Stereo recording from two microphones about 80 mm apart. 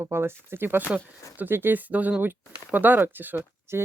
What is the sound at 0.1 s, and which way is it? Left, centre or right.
Speech, right.